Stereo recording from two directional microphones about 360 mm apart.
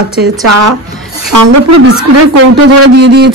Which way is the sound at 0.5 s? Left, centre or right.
Right.